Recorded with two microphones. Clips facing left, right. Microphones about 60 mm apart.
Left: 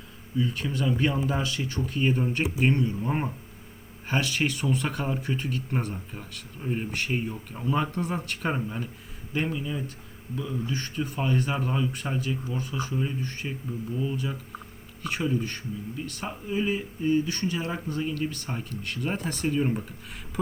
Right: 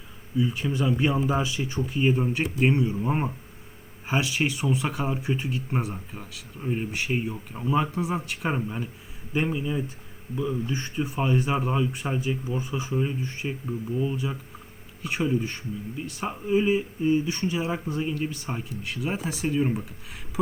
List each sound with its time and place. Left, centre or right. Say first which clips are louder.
0.3 s speech: right 2 dB; centre